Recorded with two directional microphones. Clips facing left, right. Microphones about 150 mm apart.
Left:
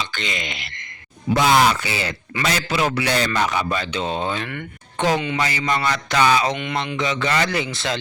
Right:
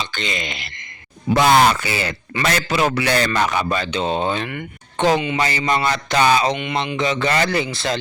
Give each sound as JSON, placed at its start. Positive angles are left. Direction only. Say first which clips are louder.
{"t": 0.0, "sound": "a sound", "louder": "right 2 dB", "side_deg": -30}
{"t": 1.3, "sound": "a man's voice", "louder": "right 2 dB", "side_deg": -60}
{"t": 3.9, "sound": "speech", "louder": "right 5 dB", "side_deg": -25}
{"t": 6.5, "sound": "speech", "louder": "right 2 dB", "side_deg": -5}
{"t": 6.9, "sound": "speech", "louder": "right 2 dB", "side_deg": -30}